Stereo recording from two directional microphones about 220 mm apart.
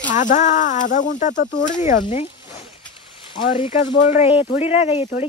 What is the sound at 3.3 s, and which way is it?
Speech, 25° left (ahead or behind).